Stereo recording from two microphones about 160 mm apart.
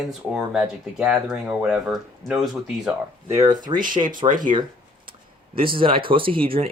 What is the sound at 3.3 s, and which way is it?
Speech, 20° right (ahead or behind).